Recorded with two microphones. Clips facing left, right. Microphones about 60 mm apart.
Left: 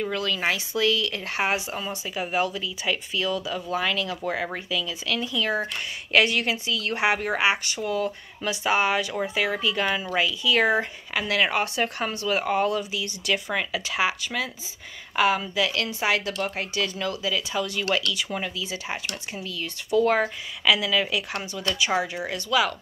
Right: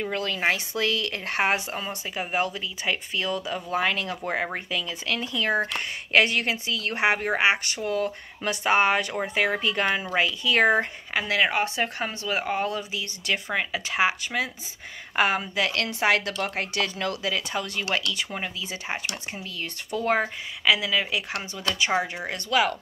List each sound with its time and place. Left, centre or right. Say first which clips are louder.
0.0 s speech: even; right
11.1 s speech: even; right
13.8 s a woman's voice: right 1 dB; right
17.7 s speech: left 1 dB; right
20.1 s speech: left 1 dB; right
22.0 s speech: left 2 dB; right